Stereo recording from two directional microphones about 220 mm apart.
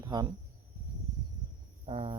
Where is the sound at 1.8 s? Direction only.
25° right (ahead or behind).